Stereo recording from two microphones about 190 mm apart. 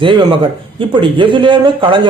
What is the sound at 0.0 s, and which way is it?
A man's voice, 25° right (ahead or behind).